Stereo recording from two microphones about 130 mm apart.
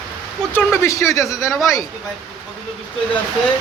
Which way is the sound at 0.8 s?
25° left (ahead or behind).